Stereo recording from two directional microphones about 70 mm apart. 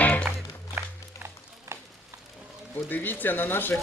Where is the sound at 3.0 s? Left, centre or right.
Left.